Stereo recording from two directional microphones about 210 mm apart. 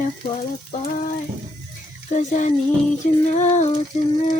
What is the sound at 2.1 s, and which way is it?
Speech, 35° left (ahead or behind).